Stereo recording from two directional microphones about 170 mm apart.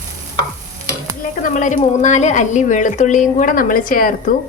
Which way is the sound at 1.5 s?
50° left (ahead or behind).